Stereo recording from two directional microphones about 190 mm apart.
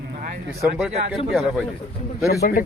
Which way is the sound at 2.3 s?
50° left (ahead or behind).